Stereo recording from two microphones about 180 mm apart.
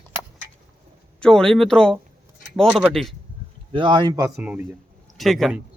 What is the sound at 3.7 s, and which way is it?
Speech, 25° right (ahead or behind).